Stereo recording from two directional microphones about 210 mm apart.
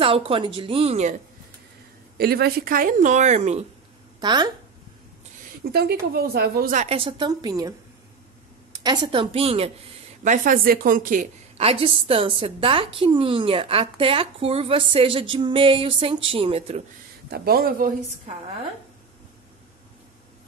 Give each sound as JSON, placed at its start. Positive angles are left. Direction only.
{"t": 0.0, "sound": "a woman's voice", "side_deg": -25}
{"t": 2.1, "sound": "a woman's voice", "side_deg": -50}
{"t": 4.2, "sound": "a woman's voice", "side_deg": -20}
{"t": 5.6, "sound": "a woman's voice", "side_deg": -50}
{"t": 8.8, "sound": "a woman's voice", "side_deg": -20}
{"t": 10.2, "sound": "a woman's voice", "side_deg": -40}
{"t": 17.3, "sound": "speech", "side_deg": -45}